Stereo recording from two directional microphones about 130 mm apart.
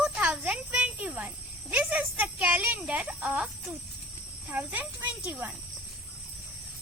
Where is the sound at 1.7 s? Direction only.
15° right (ahead or behind).